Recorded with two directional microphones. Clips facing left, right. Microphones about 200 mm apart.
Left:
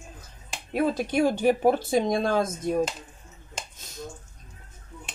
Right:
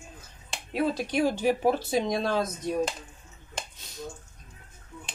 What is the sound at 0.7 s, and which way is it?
Speech, 50° left (ahead or behind).